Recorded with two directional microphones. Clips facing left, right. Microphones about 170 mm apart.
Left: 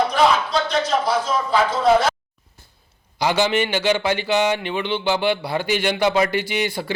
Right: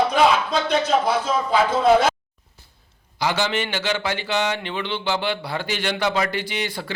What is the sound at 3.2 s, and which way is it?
A man's voice, 15° left (ahead or behind).